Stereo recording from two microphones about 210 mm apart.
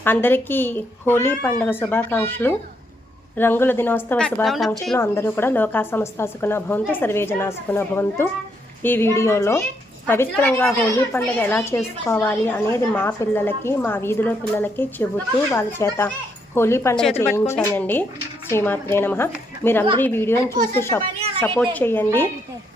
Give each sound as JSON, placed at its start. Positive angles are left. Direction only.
{"t": 0.0, "sound": "speech", "side_deg": 10}
{"t": 4.9, "sound": "speech", "side_deg": 10}